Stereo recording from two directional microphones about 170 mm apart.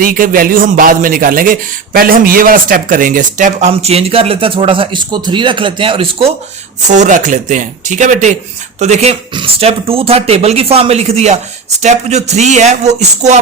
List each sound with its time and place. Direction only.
0.0 s speech: 55° right (ahead or behind); by 6.3 s 30° right (ahead or behind)
6.8 s speech: 45° right (ahead or behind)